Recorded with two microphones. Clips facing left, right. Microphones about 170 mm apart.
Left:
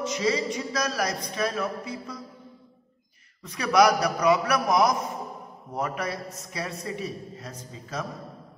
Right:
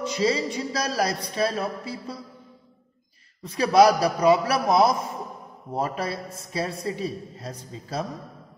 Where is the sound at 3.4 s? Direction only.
30° right (ahead or behind).